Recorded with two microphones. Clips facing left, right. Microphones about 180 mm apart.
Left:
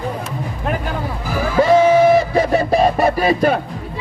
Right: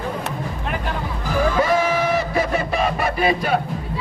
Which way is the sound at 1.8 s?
30° left (ahead or behind).